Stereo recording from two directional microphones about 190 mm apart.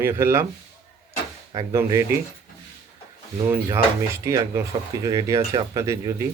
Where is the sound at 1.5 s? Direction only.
15° right (ahead or behind).